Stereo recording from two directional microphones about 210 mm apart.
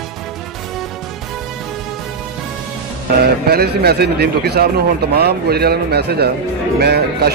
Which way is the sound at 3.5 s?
50° right (ahead or behind).